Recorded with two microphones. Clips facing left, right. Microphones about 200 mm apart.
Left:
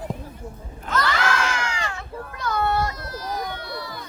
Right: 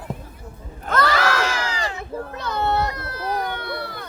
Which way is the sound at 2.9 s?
60° right (ahead or behind).